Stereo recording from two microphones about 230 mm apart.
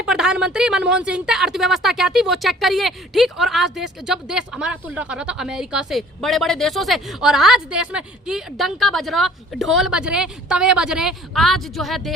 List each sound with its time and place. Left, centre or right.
0.0 s speech: centre